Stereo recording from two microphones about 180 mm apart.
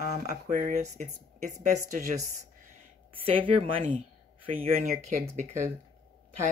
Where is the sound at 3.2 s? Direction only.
30° right (ahead or behind).